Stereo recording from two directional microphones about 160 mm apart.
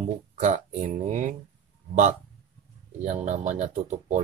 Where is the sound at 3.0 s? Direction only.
50° right (ahead or behind).